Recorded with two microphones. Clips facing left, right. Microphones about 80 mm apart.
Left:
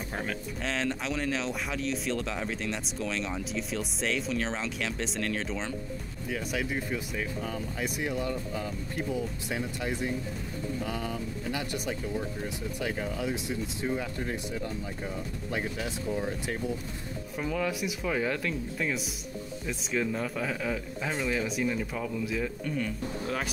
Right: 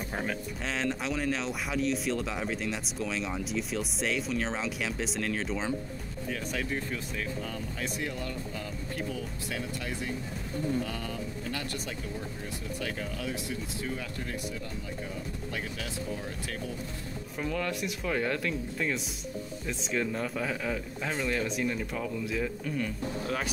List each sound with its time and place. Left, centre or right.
0.1 s speech: centre
6.2 s speech: centre; by 14.3 s left
15.5 s speech: left
17.4 s speech: centre